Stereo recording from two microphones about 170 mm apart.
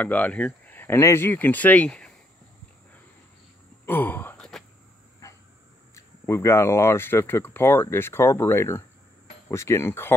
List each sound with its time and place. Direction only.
0.0 s speech: 10° left (ahead or behind)
3.8 s gasp: 10° left (ahead or behind)
5.2 s a sound: 20° left (ahead or behind)
5.9 s speech: 15° left (ahead or behind)